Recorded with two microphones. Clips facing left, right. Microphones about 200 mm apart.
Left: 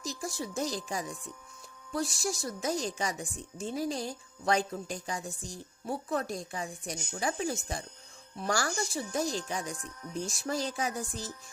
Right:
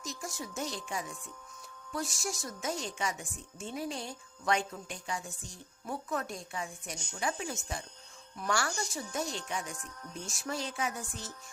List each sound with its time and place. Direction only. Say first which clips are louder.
0.0 s speech: left 4 dB; 35° left (ahead or behind)